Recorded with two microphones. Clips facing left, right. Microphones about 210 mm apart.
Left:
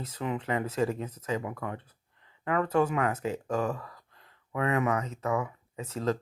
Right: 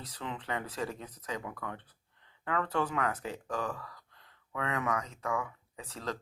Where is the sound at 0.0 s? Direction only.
25° left (ahead or behind).